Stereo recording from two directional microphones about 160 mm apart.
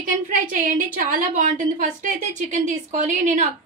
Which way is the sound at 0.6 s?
55° right (ahead or behind).